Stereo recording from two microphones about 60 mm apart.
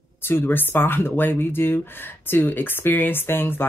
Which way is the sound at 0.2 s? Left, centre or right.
Left.